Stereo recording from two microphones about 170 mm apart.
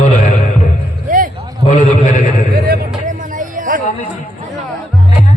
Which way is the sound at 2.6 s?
60° right (ahead or behind).